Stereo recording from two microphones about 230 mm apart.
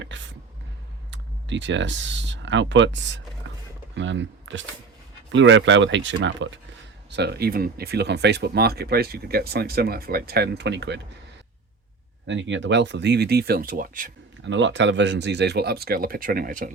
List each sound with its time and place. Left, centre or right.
0.0 s speech: right
12.3 s speech: right
14.4 s speech: right